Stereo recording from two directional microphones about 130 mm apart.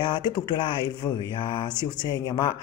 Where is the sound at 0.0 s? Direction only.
35° left (ahead or behind).